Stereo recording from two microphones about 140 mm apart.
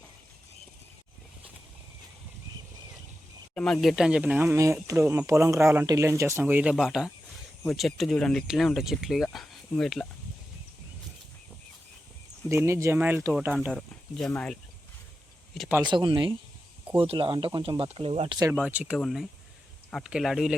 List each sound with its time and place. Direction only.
3.5 s speech: 5° left (ahead or behind)
12.5 s speech: 20° right (ahead or behind)
13.7 s speech: 5° left (ahead or behind)
15.8 s speech: 35° right (ahead or behind)
18.5 s speech: 10° right (ahead or behind)